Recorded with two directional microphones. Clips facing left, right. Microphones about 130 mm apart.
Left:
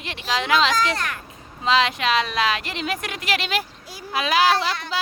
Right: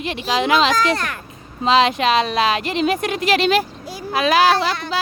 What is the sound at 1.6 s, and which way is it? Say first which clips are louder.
Speech: right 5 dB; 20° right (ahead or behind).